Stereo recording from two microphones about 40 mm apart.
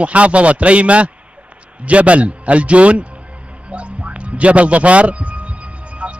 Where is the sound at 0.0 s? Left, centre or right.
Right.